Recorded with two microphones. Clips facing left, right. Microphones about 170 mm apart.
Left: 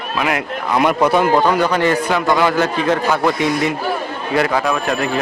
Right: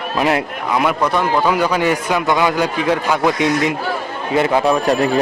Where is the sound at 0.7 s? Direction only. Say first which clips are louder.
Left 3 dB; centre (ahead or behind).